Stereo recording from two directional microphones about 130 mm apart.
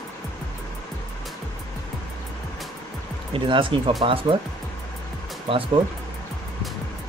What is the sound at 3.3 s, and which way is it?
Speech, 40° right (ahead or behind).